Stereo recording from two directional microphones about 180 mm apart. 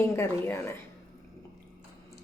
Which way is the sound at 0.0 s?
15° left (ahead or behind).